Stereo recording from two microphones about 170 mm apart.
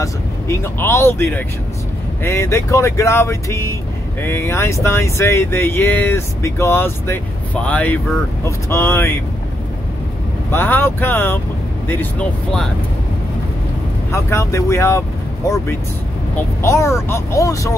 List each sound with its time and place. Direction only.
0.0 s speech: 15° left (ahead or behind)
10.5 s speech: 10° left (ahead or behind)
14.1 s speech: 15° left (ahead or behind)